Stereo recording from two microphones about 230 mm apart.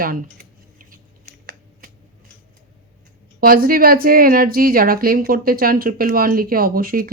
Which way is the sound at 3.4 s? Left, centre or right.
Right.